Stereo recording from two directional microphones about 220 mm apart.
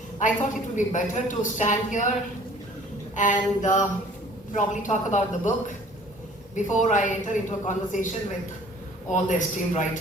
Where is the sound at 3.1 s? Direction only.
35° left (ahead or behind).